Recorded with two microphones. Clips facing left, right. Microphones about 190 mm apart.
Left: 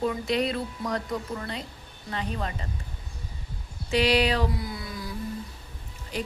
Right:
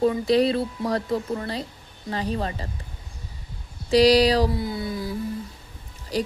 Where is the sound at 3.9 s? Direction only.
35° right (ahead or behind).